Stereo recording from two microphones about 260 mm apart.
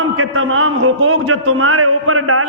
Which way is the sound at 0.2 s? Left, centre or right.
Right.